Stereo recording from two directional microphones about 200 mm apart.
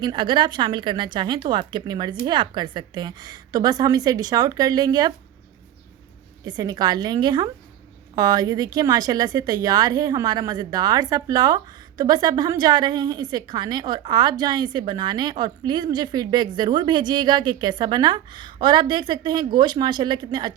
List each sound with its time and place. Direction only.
0.0 s speech: 25° right (ahead or behind)
6.4 s speech: 20° right (ahead or behind)